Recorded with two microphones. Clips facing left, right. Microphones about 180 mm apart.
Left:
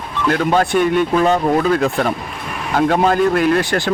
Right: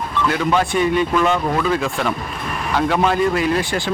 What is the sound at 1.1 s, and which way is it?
Speech, 40° left (ahead or behind).